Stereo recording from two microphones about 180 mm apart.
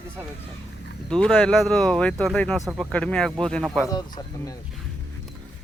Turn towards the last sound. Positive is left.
turn(degrees=20)  # may be behind; listen again after turning